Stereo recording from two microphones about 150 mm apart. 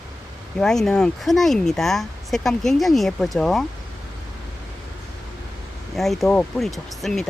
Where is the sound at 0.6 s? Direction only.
5° left (ahead or behind).